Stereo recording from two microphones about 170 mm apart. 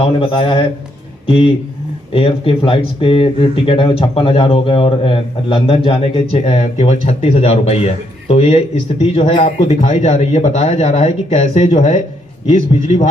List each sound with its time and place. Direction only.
0.2 s speech: 30° left (ahead or behind)